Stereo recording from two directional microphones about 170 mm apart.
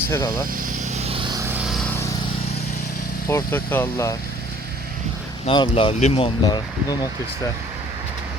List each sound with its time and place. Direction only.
0.1 s speech: 20° left (ahead or behind)
0.9 s vehicle: 35° right (ahead or behind)
1.5 s vehicle: 5° right (ahead or behind)
3.2 s speech: 15° left (ahead or behind)
5.5 s speech: 30° left (ahead or behind)